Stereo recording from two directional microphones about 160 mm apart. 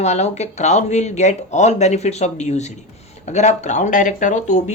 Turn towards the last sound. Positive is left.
turn(degrees=45)  # may be behind; listen again after turning